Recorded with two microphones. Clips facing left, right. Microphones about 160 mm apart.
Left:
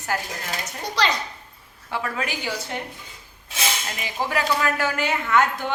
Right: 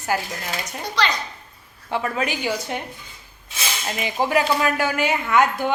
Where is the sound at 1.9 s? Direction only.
20° right (ahead or behind).